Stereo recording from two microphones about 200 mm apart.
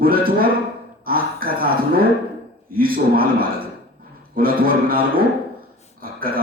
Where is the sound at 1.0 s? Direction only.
45° right (ahead or behind).